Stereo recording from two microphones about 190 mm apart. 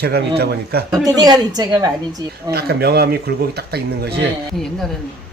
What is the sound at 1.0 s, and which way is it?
Speech, 20° right (ahead or behind).